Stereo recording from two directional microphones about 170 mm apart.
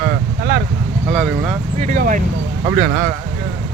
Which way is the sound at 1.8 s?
50° right (ahead or behind).